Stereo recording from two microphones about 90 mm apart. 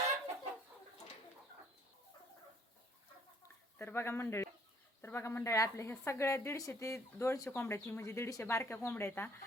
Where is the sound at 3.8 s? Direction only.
25° left (ahead or behind).